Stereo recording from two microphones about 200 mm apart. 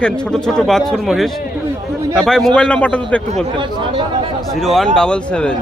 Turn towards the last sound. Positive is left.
turn(degrees=5)  # may be behind; listen again after turning